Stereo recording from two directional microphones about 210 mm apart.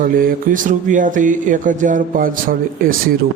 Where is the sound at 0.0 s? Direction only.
40° right (ahead or behind).